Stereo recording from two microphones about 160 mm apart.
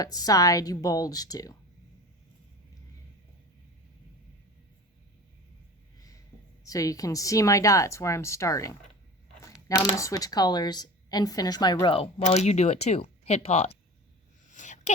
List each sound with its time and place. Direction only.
0.0 s speech: 25° left (ahead or behind)
6.7 s speech: 20° left (ahead or behind); by 13.7 s 40° left (ahead or behind)
14.5 s a sound: 50° left (ahead or behind)